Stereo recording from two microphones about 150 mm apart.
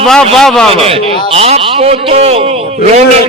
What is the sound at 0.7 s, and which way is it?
A man's voice, 40° right (ahead or behind).